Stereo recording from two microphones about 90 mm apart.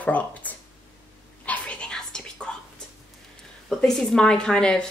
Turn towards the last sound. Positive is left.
turn(degrees=10)  # may be behind; listen again after turning